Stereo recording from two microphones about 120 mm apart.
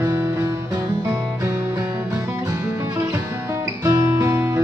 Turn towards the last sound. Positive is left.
turn(degrees=-20)  # may be behind; listen again after turning